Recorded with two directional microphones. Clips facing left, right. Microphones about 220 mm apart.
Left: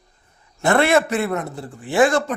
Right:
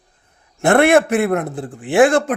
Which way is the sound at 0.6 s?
55° right (ahead or behind).